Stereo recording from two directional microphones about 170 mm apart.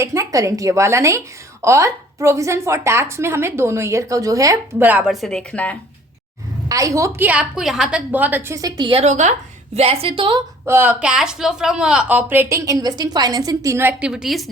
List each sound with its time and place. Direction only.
0.0 s a woman's voice: 20° right (ahead or behind); by 5.7 s 5° left (ahead or behind)
6.7 s a woman's voice: 20° right (ahead or behind)
10.7 s a woman's voice: 10° right (ahead or behind)